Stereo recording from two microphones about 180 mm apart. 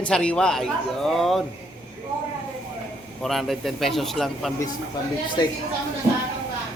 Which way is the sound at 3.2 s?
Centre (ahead or behind).